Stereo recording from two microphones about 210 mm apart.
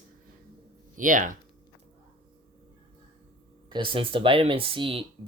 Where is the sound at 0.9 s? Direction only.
40° right (ahead or behind).